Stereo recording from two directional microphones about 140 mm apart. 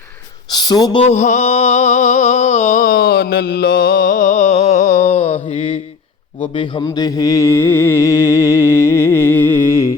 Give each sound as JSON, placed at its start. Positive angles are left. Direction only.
{"t": 0.5, "sound": "speech", "side_deg": 30}
{"t": 1.0, "sound": "a sound", "side_deg": 55}
{"t": 3.6, "sound": "music", "side_deg": 90}
{"t": 6.4, "sound": "speech", "side_deg": 35}
{"t": 6.8, "sound": "music", "side_deg": 25}